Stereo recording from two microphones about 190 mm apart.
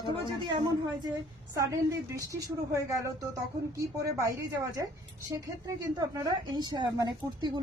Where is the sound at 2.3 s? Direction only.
20° right (ahead or behind).